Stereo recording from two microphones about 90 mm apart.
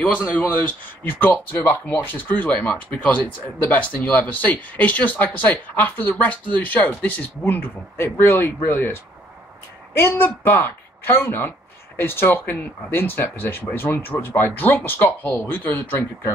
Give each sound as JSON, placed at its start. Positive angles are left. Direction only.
{"t": 0.7, "sound": "speech", "side_deg": 20}